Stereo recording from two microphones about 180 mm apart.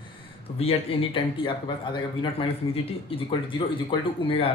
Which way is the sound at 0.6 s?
30° left (ahead or behind).